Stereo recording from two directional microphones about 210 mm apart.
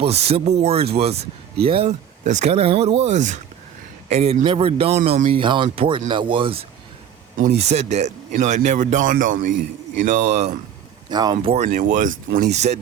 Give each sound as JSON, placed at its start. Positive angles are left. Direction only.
{"t": 0.0, "sound": "a man's voice", "side_deg": -30}
{"t": 11.1, "sound": "speech", "side_deg": -20}
{"t": 11.3, "sound": "a man's voice", "side_deg": -30}